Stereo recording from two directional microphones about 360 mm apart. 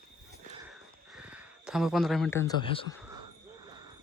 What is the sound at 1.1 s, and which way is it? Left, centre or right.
Speech, centre.